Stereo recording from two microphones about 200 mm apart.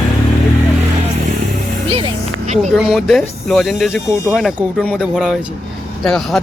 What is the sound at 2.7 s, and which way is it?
Speech, centre (ahead or behind).